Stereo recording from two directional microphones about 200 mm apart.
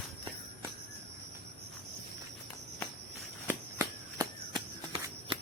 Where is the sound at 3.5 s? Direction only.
20° right (ahead or behind).